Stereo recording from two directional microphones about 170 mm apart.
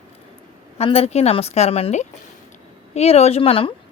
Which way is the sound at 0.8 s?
35° left (ahead or behind).